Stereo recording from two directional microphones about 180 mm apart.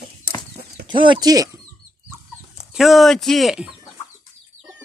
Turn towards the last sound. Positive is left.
turn(degrees=-5)  # may be behind; listen again after turning